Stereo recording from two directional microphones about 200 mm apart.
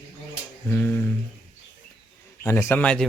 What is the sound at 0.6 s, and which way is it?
Speech, 5° left (ahead or behind).